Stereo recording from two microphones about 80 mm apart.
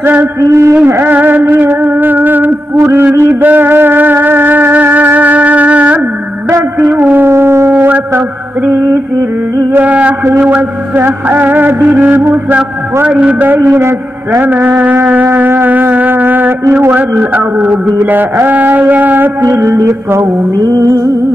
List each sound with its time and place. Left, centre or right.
0.0 s a sound: right
0.4 s mantra: right
0.8 s music: right
6.5 s a sound: right
11.0 s music: right
13.0 s a sound: centre
18.0 s music: right
19.4 s mantra: right
20.5 s music: right